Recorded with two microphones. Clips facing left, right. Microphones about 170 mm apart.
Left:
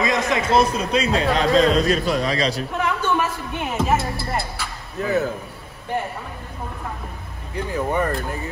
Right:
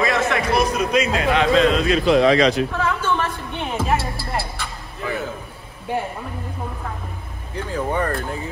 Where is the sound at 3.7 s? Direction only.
5° right (ahead or behind).